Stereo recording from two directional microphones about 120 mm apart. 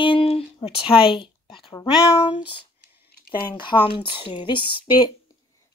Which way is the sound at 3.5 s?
40° left (ahead or behind).